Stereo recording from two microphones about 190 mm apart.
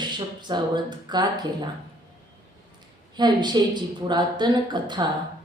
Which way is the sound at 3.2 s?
20° right (ahead or behind).